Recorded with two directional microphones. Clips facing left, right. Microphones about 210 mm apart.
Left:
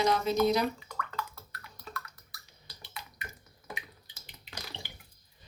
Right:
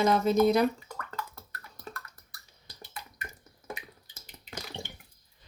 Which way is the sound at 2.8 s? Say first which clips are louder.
Right 2 dB; 45° right (ahead or behind).